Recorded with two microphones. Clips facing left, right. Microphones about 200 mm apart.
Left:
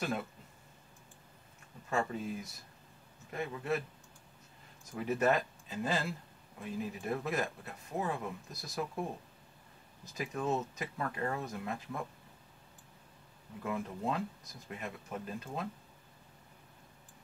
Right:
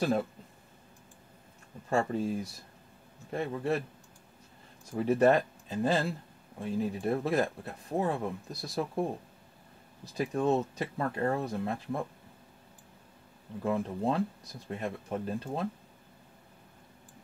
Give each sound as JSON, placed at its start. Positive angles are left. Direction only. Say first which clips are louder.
{"t": 1.9, "sound": "speech", "louder": "right 6 dB", "side_deg": -30}
{"t": 4.9, "sound": "speech", "louder": "right 6 dB", "side_deg": -35}
{"t": 13.6, "sound": "speech", "louder": "right 7 dB", "side_deg": -30}